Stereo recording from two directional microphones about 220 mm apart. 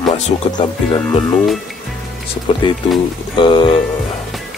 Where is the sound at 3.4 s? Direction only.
20° left (ahead or behind).